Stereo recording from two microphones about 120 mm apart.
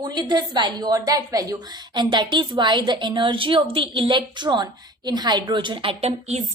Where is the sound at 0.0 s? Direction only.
35° right (ahead or behind).